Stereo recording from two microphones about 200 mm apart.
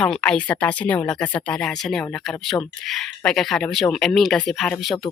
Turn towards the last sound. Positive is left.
turn(degrees=0)  # may be behind; listen again after turning